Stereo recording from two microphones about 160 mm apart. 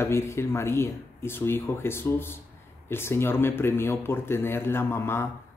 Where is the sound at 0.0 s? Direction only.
15° left (ahead or behind).